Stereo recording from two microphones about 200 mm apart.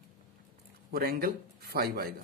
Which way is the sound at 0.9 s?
50° right (ahead or behind).